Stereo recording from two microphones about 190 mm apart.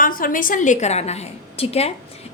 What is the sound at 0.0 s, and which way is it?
A woman's voice, 45° left (ahead or behind).